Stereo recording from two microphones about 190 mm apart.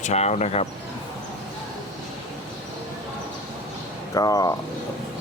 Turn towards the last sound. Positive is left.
turn(degrees=20)  # may be behind; listen again after turning